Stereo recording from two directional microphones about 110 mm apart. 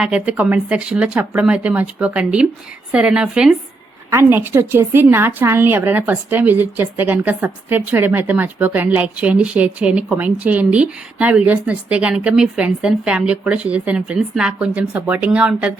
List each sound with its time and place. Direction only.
0.0 s a woman's voice: 10° right (ahead or behind)
4.1 s a woman's voice: 20° right (ahead or behind)